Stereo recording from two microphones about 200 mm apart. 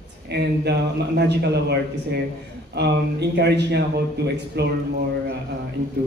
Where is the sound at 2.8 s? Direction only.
55° right (ahead or behind).